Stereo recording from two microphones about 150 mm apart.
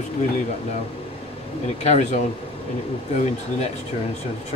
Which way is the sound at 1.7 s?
45° left (ahead or behind).